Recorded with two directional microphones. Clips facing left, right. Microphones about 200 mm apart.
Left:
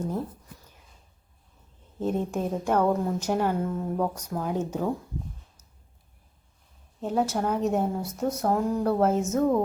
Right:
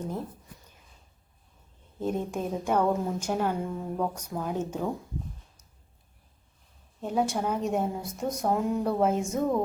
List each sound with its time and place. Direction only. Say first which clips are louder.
2.0 s a woman's voice: left 2 dB; 10° right (ahead or behind)
4.1 s a woman's voice: left 3 dB; 10° right (ahead or behind)
4.4 s speech: left 2 dB; 10° left (ahead or behind)
7.1 s a woman's voice: left 2 dB; 10° right (ahead or behind)
8.0 s a woman's voice: left 3 dB; 10° right (ahead or behind)
8.4 s a woman's voice: left 1 dB; centre (ahead or behind)